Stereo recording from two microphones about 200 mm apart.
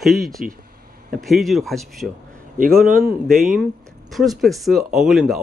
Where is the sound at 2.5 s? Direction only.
45° right (ahead or behind).